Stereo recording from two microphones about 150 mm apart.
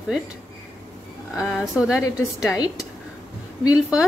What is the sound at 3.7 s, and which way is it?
Speech, 10° right (ahead or behind).